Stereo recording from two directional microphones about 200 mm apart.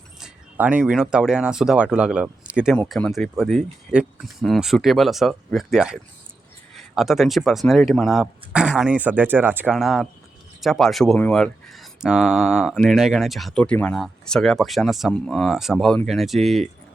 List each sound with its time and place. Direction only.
0.2 s speech: 10° right (ahead or behind)